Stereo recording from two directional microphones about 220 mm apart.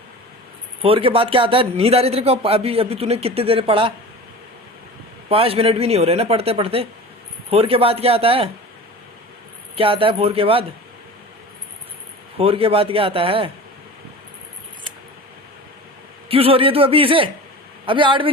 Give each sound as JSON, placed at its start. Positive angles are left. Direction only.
{"t": 0.8, "sound": "speech", "side_deg": -25}
{"t": 5.3, "sound": "speech", "side_deg": -25}
{"t": 9.7, "sound": "speech", "side_deg": -25}
{"t": 12.4, "sound": "speech", "side_deg": -25}
{"t": 16.3, "sound": "speech", "side_deg": -25}